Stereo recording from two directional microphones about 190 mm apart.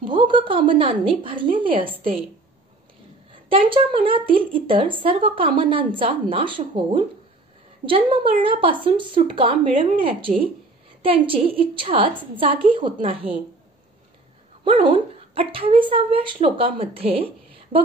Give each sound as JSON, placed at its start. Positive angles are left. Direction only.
{"t": 0.0, "sound": "speech", "side_deg": -25}
{"t": 3.4, "sound": "speech", "side_deg": -30}
{"t": 14.6, "sound": "speech", "side_deg": -30}